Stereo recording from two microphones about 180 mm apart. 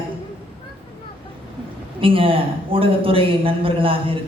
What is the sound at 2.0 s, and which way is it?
A man's voice, 30° right (ahead or behind).